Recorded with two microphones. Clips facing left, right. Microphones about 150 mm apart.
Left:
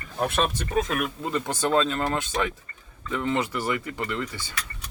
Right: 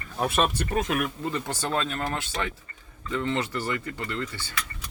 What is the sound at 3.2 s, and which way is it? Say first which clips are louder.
Speech: left 3 dB; 15° left (ahead or behind).